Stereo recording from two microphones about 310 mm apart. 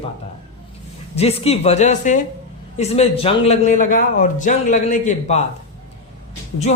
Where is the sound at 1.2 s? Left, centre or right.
Centre.